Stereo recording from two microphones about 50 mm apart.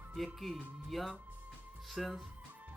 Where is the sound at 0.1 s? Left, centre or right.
Centre.